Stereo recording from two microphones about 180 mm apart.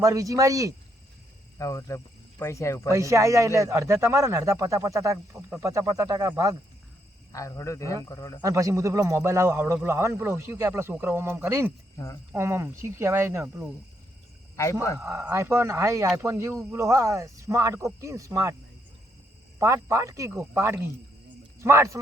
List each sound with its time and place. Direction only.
0.0 s speech: 20° right (ahead or behind)
1.5 s speech: 15° left (ahead or behind)
2.9 s a man's voice: 15° right (ahead or behind)
7.3 s speech: 15° left (ahead or behind)
8.4 s a man's voice: 20° right (ahead or behind)
14.5 s speech: 15° left (ahead or behind)
14.9 s a man's voice: 15° right (ahead or behind)
19.5 s a man's voice: 15° right (ahead or behind)